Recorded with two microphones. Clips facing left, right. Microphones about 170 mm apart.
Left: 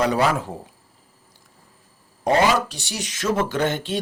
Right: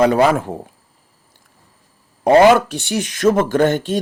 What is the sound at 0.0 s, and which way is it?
Speech, 55° right (ahead or behind).